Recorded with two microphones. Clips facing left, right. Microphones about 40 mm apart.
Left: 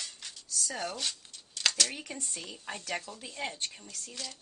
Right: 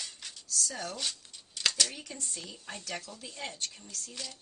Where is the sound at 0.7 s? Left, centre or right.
Left.